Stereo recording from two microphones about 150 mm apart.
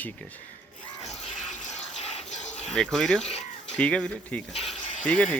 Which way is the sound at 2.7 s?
5° left (ahead or behind).